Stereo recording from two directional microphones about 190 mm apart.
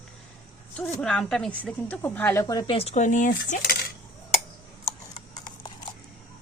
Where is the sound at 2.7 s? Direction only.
35° left (ahead or behind).